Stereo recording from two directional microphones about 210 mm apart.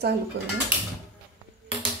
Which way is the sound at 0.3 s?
55° right (ahead or behind).